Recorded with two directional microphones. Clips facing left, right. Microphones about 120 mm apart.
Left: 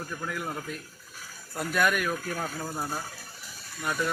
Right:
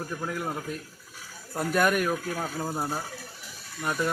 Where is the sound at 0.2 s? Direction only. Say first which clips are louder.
Right 2 dB; 25° right (ahead or behind).